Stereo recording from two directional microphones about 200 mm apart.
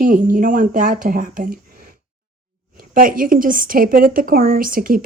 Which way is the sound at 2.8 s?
45° right (ahead or behind).